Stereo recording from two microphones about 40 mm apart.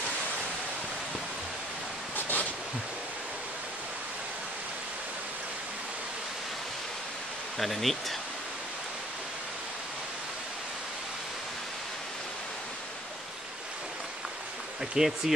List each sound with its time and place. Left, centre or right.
2.1 s a sound: left
7.5 s speech: centre
15.0 s speech: centre